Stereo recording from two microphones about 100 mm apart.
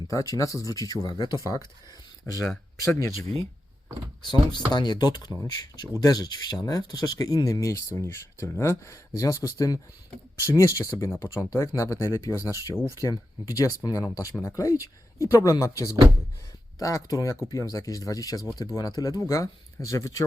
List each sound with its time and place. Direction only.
0.1 s speech: 35° left (ahead or behind)
2.8 s speech: 30° left (ahead or behind)
4.2 s speech: 50° left (ahead or behind); by 20.2 s 30° left (ahead or behind)